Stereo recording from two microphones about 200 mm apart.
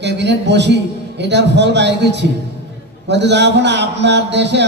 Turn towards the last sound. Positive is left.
turn(degrees=-60)  # may be behind; listen again after turning